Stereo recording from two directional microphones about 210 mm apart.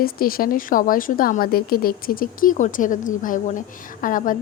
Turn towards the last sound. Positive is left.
turn(degrees=40)  # may be behind; listen again after turning